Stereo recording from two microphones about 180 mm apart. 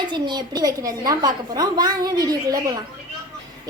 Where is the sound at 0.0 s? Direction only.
25° right (ahead or behind).